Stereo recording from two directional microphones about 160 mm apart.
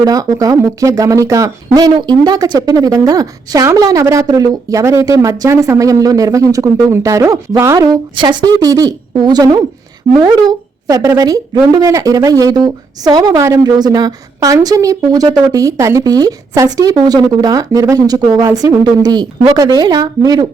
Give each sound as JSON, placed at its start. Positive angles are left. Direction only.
{"t": 0.0, "sound": "speech", "side_deg": -25}